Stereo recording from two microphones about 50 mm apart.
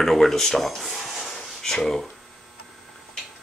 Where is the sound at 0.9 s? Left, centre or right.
Centre.